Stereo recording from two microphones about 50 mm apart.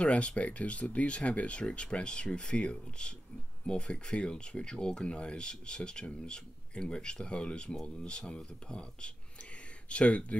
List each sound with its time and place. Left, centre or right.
0.0 s speech: left